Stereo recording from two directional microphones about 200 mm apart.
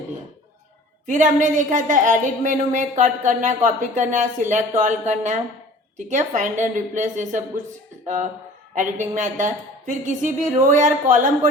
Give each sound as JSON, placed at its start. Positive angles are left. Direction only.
{"t": 1.0, "sound": "a woman's voice", "side_deg": -40}